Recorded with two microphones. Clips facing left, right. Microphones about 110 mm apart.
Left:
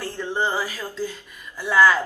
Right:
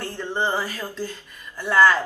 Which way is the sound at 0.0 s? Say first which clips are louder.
Left 1 dB; 5° left (ahead or behind).